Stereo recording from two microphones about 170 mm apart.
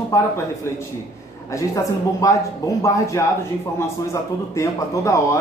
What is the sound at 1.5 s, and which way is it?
Speech, 20° left (ahead or behind).